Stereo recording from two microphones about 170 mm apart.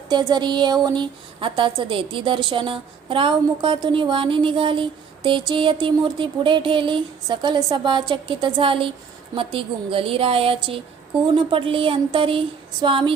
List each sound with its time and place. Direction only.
0.1 s a woman's voice: 25° right (ahead or behind)